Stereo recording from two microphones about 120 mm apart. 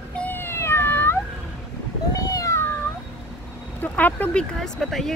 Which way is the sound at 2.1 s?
30° left (ahead or behind).